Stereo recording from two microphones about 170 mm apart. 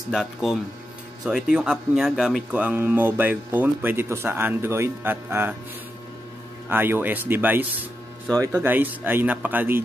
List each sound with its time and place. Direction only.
0.1 s speech: centre (ahead or behind)
6.7 s speech: 10° right (ahead or behind)